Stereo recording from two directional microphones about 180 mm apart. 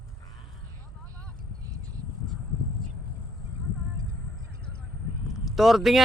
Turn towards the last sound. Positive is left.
turn(degrees=0)  # may be behind; listen again after turning